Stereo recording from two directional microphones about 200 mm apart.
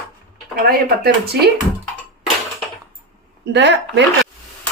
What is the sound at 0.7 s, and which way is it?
Speech, 50° right (ahead or behind).